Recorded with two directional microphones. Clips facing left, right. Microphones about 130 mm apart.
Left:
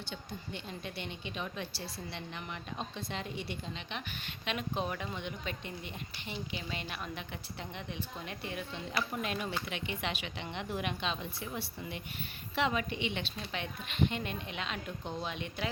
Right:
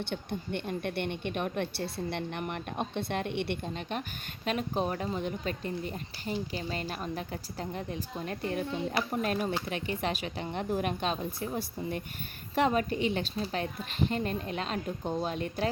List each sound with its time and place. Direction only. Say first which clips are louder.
0.0 s a woman's voice: right 8 dB; 60° right (ahead or behind)
4.4 s a woman's voice: right 5 dB; 40° right (ahead or behind)